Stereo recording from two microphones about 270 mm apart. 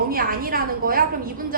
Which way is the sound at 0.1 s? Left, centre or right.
Right.